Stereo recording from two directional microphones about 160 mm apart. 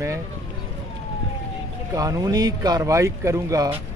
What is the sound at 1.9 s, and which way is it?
Speech, 20° right (ahead or behind).